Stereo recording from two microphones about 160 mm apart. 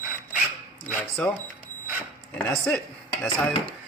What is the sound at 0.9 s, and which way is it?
Speech, 10° left (ahead or behind).